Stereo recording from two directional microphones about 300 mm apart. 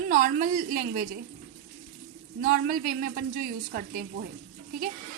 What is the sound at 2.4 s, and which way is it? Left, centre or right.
A woman's voice, right.